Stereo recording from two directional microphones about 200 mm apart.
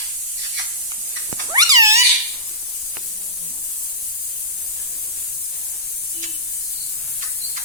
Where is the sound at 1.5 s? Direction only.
20° right (ahead or behind).